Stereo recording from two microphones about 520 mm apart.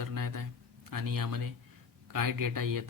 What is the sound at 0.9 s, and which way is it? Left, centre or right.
Speech, right.